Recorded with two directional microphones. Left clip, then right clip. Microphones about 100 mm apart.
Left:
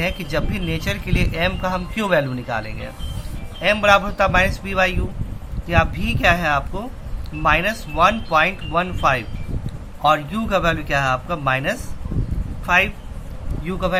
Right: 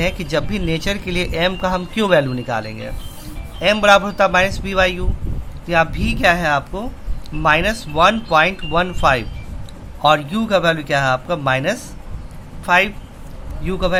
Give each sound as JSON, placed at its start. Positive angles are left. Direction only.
{"t": 0.0, "sound": "speech", "side_deg": -40}
{"t": 3.6, "sound": "speech", "side_deg": -50}